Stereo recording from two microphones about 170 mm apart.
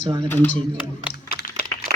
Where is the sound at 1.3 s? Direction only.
60° left (ahead or behind).